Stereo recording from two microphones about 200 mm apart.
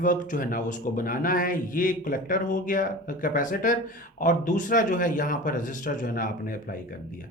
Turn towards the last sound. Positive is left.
turn(degrees=45)  # may be behind; listen again after turning